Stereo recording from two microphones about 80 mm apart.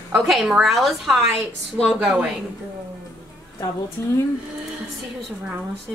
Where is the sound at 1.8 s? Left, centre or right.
Centre.